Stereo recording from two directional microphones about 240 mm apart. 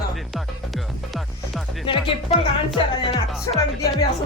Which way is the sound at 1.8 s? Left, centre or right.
Left.